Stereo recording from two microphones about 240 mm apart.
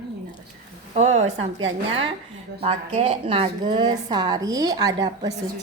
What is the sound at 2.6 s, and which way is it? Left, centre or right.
A woman's voice, right.